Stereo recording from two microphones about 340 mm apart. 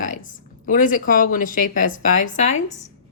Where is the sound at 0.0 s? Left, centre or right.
Left.